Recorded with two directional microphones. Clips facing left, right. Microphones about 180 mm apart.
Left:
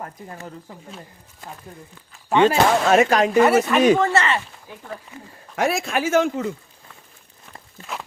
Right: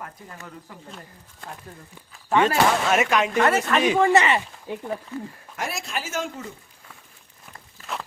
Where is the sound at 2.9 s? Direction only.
35° left (ahead or behind).